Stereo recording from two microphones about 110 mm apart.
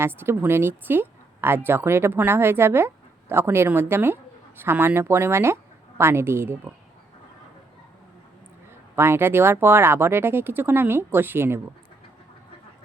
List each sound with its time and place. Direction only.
0.0 s speech: 20° right (ahead or behind)
9.0 s speech: 20° right (ahead or behind)